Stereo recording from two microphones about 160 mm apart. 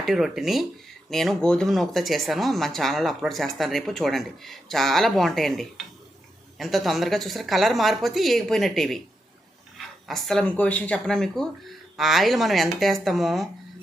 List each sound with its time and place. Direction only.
0.0 s a woman's voice: centre (ahead or behind)